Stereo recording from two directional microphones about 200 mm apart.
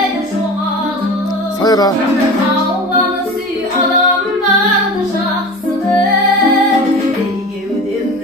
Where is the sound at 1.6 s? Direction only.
20° left (ahead or behind).